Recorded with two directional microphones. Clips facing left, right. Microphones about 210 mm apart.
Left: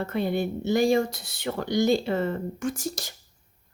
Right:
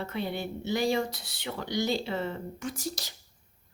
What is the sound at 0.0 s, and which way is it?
A woman's voice, 50° left (ahead or behind).